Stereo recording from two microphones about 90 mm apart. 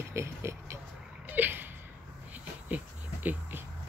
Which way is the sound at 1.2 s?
20° right (ahead or behind).